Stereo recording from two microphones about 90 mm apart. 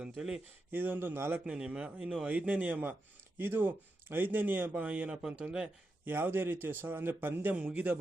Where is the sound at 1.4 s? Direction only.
10° right (ahead or behind).